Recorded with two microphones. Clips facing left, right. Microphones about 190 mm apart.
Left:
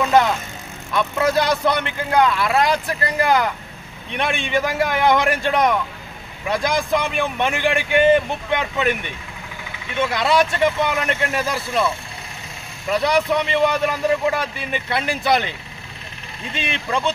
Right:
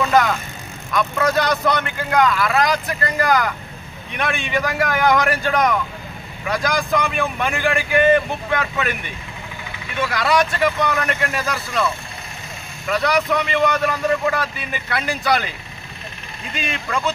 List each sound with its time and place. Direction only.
0.0 s vehicle: 25° left (ahead or behind)
0.9 s speech: 25° left (ahead or behind)
9.9 s speech: 25° left (ahead or behind)
16.5 s speech: 25° left (ahead or behind)